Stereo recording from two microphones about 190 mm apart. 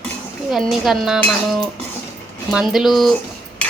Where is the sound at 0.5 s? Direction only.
Centre (ahead or behind).